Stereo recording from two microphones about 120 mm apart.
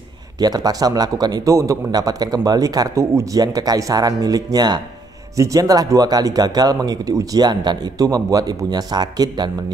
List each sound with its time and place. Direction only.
0.4 s a man's voice: 35° right (ahead or behind)